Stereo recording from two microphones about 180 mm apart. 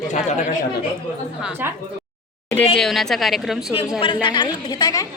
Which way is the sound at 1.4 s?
10° right (ahead or behind).